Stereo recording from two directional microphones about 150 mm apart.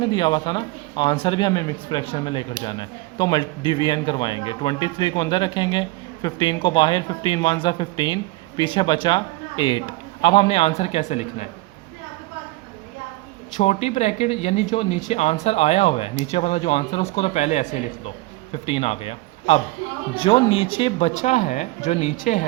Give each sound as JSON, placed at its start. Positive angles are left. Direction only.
{"t": 0.0, "sound": "speech", "side_deg": 30}
{"t": 13.6, "sound": "speech", "side_deg": 45}